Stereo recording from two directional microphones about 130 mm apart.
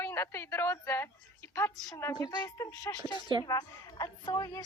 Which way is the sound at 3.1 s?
35° left (ahead or behind).